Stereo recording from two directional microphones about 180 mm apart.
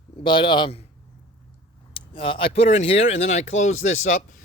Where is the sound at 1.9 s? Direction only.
30° left (ahead or behind).